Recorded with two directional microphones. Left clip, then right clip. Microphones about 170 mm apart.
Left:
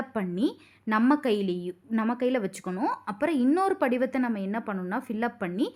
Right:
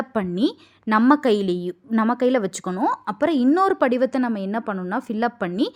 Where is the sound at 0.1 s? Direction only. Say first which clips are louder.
Right 5 dB; 40° right (ahead or behind).